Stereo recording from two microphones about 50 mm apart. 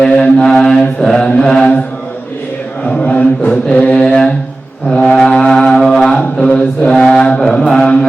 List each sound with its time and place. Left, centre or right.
0.0 s mantra: centre
3.0 s chant: left
3.7 s mantra: centre
4.9 s music: centre
5.7 s a sound: centre
6.9 s mantra: centre